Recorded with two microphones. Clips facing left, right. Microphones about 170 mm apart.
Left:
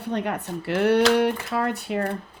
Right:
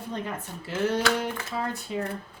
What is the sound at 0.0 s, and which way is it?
Speech, 70° left (ahead or behind).